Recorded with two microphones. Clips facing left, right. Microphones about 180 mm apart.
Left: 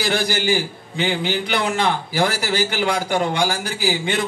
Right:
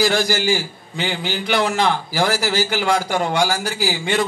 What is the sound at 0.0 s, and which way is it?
A man's voice, 55° left (ahead or behind).